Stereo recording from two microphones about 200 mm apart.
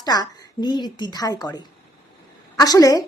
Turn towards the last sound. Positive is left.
turn(degrees=15)  # may be behind; listen again after turning